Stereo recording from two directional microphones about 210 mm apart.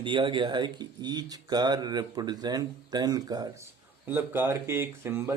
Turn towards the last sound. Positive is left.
turn(degrees=-10)  # may be behind; listen again after turning